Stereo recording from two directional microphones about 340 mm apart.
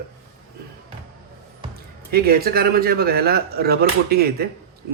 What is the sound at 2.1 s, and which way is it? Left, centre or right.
Speech, right.